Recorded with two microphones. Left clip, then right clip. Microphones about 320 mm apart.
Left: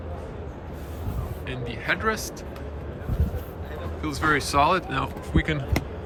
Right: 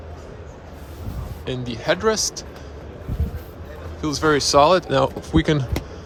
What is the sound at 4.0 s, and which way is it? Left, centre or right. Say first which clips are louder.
Speech: right 5 dB; centre.